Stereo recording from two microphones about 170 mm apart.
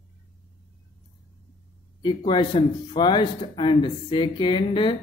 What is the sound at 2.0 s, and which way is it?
Speech, 25° left (ahead or behind).